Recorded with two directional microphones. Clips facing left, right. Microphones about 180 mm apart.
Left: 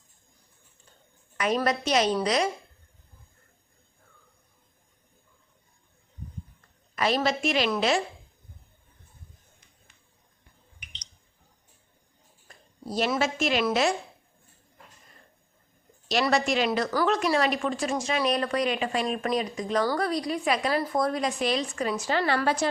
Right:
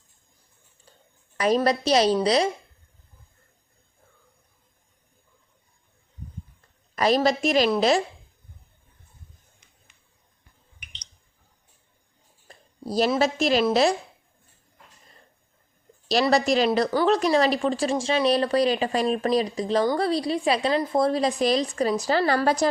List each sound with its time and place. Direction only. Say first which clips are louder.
1.4 s a woman's voice: right 4 dB; 35° right (ahead or behind)
6.9 s a woman's voice: right 5 dB; 40° right (ahead or behind)
12.5 s a woman's voice: right 4 dB; 35° right (ahead or behind)
16.0 s a woman's voice: right 4 dB; 35° right (ahead or behind)